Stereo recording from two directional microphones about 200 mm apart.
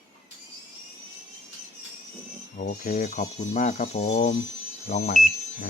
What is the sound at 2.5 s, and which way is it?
Speech, 40° left (ahead or behind).